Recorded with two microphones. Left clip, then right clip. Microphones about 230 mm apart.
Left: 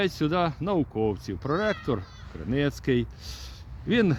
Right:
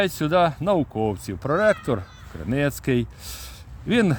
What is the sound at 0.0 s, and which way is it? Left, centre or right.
A man's voice, right.